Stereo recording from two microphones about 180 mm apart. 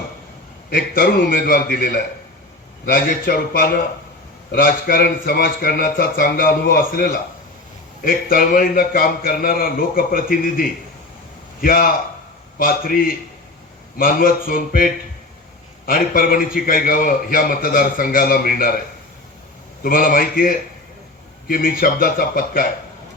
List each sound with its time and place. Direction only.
0.7 s a man's voice: 55° left (ahead or behind)
15.9 s a man's voice: 55° left (ahead or behind)
19.8 s a man's voice: 50° left (ahead or behind)